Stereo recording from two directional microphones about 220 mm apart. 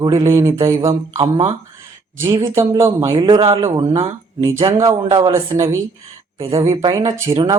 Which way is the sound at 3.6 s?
15° right (ahead or behind).